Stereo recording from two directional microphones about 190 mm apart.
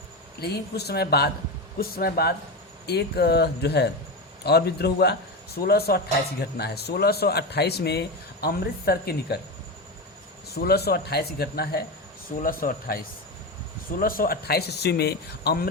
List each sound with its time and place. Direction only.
0.3 s a man's voice: 55° left (ahead or behind)
10.5 s a man's voice: 55° left (ahead or behind)